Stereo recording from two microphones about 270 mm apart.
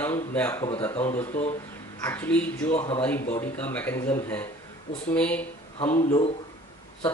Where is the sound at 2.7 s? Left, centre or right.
Centre.